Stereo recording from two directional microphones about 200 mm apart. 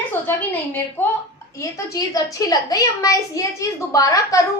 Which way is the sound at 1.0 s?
10° left (ahead or behind).